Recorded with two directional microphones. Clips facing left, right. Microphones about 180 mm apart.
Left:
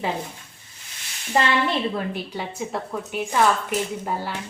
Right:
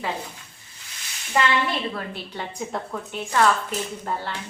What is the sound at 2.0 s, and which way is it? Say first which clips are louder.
A woman's voice: left 4 dB; 10° left (ahead or behind).